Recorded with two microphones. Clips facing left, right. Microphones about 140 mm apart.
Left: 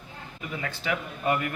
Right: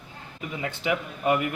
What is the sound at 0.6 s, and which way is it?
Speech, 20° right (ahead or behind).